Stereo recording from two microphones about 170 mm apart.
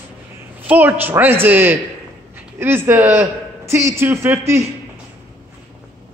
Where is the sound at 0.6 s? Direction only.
10° right (ahead or behind).